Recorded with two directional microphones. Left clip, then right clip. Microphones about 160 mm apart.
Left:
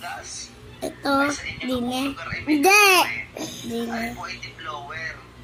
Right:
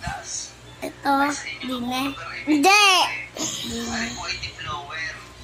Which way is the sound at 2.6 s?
25° right (ahead or behind).